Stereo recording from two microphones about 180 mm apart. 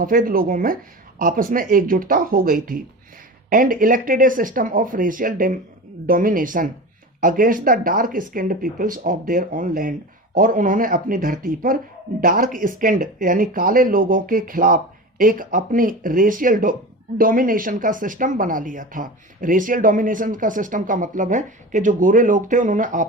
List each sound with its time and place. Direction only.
0.0 s speech: 50° right (ahead or behind)